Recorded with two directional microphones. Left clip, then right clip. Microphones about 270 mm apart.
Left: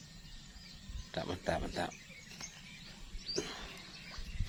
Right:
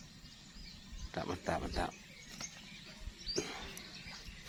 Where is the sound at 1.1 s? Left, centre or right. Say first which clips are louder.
Left 1 dB; centre.